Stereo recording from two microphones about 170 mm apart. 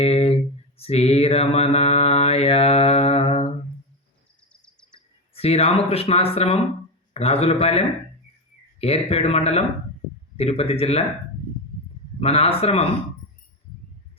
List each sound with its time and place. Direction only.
0.0 s a sound: 35° left (ahead or behind)
0.8 s mantra: 35° left (ahead or behind)
5.3 s speech: 35° left (ahead or behind)
12.2 s speech: 35° left (ahead or behind)